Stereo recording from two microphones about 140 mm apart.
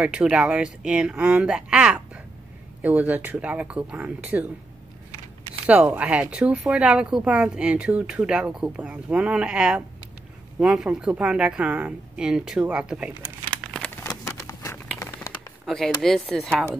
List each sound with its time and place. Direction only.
0.0 s speech: 5° right (ahead or behind)
5.7 s speech: 10° right (ahead or behind)
13.7 s a sound: 5° left (ahead or behind)
14.0 s a sound: 25° left (ahead or behind)
15.6 s chop: 5° left (ahead or behind)
16.0 s speech: centre (ahead or behind)